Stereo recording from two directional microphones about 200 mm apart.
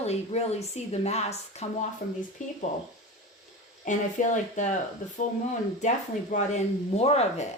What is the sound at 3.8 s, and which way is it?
Speech, 40° left (ahead or behind).